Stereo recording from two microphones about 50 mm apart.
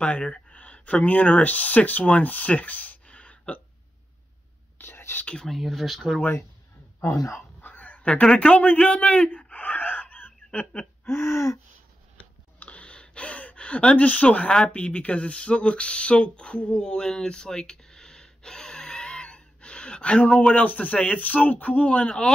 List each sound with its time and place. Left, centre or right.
0.0 s speech: left
3.1 s hiccup: left
4.7 s whispering: left
5.2 s speech: left
5.5 s speech: centre
7.0 s speech: left
7.6 s a sound: left
8.2 s speech: left
11.1 s gasp: left
12.5 s gasp: left
14.7 s speech: left